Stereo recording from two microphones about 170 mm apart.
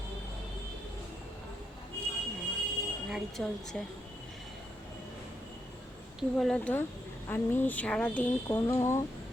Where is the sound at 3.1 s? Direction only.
Centre (ahead or behind).